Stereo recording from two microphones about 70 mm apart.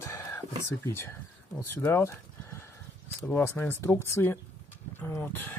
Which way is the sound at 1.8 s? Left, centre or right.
Left.